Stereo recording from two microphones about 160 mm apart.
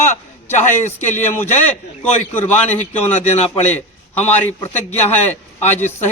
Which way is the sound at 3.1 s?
45° left (ahead or behind).